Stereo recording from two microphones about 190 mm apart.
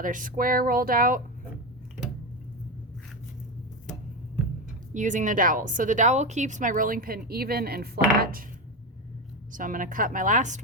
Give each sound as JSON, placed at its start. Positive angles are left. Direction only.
{"t": 0.0, "sound": "speech", "side_deg": -45}
{"t": 4.9, "sound": "speech", "side_deg": -40}
{"t": 9.5, "sound": "speech", "side_deg": -45}